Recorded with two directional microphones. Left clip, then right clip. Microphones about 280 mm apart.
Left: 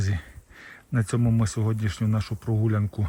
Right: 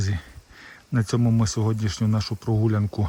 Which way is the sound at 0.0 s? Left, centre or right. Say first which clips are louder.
Right 1 dB; centre.